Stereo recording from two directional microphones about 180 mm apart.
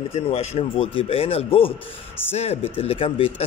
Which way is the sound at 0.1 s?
35° left (ahead or behind).